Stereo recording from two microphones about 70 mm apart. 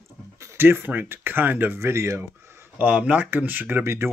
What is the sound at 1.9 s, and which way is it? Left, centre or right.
Speech, right.